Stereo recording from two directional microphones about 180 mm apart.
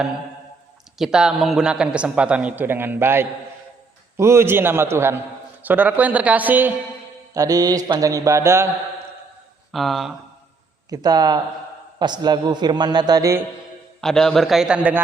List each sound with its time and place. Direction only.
0.9 s a man's voice: 5° right (ahead or behind)
9.7 s a man's voice: centre (ahead or behind)
10.8 s a man's voice: 20° right (ahead or behind)
14.0 s a man's voice: 5° left (ahead or behind)